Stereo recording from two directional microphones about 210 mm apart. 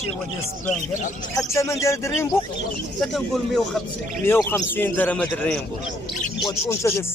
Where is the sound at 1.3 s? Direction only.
15° left (ahead or behind).